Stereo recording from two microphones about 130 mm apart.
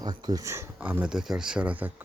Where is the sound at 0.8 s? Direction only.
10° right (ahead or behind).